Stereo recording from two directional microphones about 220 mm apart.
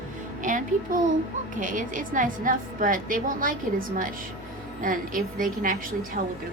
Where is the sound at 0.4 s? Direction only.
35° right (ahead or behind).